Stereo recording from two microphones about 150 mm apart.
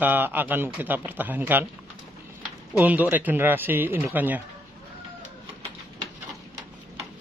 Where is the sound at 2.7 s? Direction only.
10° right (ahead or behind).